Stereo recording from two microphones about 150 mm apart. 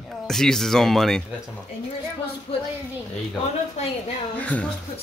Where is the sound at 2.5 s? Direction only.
40° left (ahead or behind).